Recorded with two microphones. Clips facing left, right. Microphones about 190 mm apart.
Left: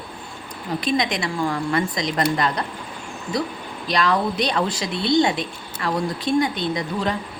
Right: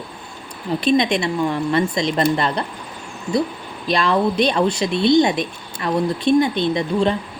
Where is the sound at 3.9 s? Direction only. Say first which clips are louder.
Right 3 dB; 25° right (ahead or behind).